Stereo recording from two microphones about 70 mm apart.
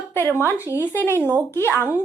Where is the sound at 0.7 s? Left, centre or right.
Left.